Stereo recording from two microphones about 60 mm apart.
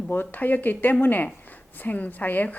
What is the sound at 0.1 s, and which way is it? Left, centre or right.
A woman's voice, left.